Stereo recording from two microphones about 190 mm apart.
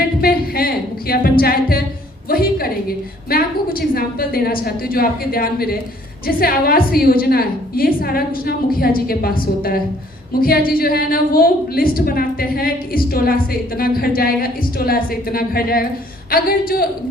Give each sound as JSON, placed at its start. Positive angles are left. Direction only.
{"t": 0.2, "sound": "music", "side_deg": 50}
{"t": 2.3, "sound": "a sound", "side_deg": 50}
{"t": 3.2, "sound": "a woman's voice", "side_deg": 50}